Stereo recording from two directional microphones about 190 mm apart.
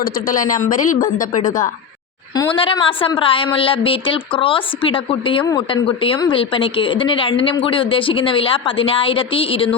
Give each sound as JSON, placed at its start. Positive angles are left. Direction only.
{"t": 0.0, "sound": "a woman's voice", "side_deg": 45}
{"t": 2.3, "sound": "a woman's voice", "side_deg": 25}